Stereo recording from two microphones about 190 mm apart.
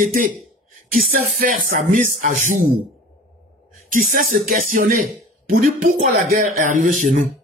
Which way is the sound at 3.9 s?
45° right (ahead or behind).